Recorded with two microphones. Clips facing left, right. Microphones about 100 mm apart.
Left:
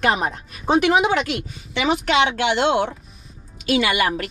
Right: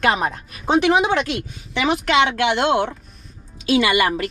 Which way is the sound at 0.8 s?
35° right (ahead or behind).